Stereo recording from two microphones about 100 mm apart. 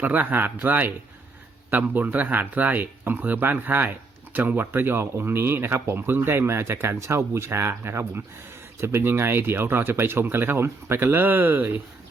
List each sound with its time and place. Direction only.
0.0 s speech: 15° right (ahead or behind)